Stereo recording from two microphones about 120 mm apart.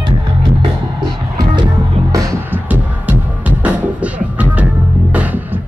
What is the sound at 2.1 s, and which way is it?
Music, 30° right (ahead or behind).